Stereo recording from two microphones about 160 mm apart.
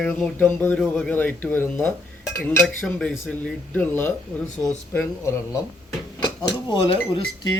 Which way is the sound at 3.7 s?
10° left (ahead or behind).